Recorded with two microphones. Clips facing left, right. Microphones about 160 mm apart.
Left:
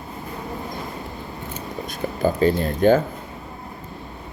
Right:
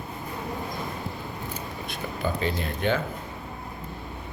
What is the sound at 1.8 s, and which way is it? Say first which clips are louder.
Speech: left 8 dB; 40° left (ahead or behind).